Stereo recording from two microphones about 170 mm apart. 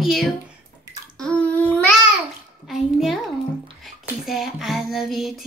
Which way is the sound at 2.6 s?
Centre (ahead or behind).